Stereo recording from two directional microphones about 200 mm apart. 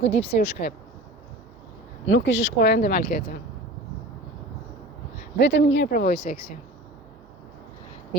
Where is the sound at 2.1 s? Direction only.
65° left (ahead or behind); by 3.3 s 50° left (ahead or behind).